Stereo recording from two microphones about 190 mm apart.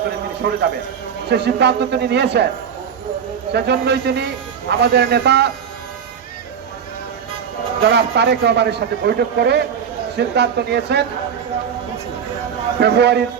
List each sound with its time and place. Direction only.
0.4 s a man's voice: 65° right (ahead or behind)
3.5 s a man's voice: 60° right (ahead or behind)
7.8 s a man's voice: 60° right (ahead or behind)
12.8 s a man's voice: 60° right (ahead or behind)